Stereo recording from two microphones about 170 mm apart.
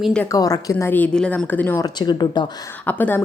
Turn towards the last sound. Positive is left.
turn(degrees=10)  # may be behind; listen again after turning